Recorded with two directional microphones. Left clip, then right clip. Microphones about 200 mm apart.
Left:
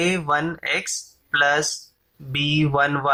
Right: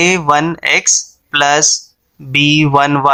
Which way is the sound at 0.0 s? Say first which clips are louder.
Right 10 dB; 40° right (ahead or behind).